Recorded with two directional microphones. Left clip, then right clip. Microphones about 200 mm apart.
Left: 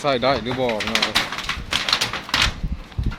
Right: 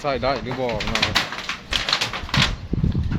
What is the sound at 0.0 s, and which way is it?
Speech, 20° left (ahead or behind).